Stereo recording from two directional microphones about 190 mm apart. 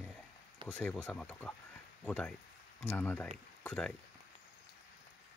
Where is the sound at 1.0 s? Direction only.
5° left (ahead or behind).